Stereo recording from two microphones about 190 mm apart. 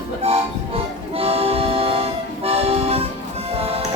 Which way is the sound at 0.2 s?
30° right (ahead or behind).